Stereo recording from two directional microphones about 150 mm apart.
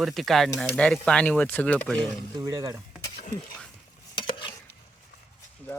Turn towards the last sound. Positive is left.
turn(degrees=10)  # may be behind; listen again after turning